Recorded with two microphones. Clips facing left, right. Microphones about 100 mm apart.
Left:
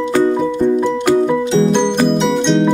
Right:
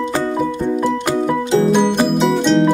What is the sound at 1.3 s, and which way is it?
Music, 5° right (ahead or behind).